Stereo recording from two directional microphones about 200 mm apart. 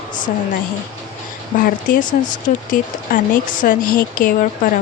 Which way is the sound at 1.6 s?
45° left (ahead or behind).